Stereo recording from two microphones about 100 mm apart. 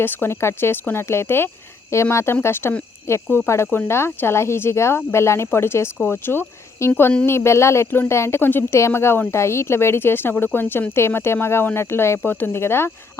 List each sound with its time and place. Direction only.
0.0 s speech: 20° left (ahead or behind)